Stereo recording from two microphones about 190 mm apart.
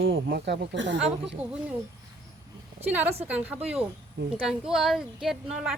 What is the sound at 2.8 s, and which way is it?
A woman's voice, 10° right (ahead or behind).